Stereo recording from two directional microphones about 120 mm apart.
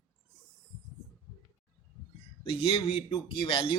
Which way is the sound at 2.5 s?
50° left (ahead or behind).